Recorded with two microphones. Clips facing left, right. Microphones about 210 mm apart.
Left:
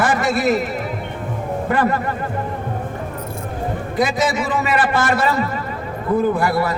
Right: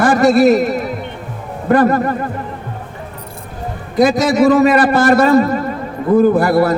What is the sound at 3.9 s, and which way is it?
A man's voice, 40° right (ahead or behind).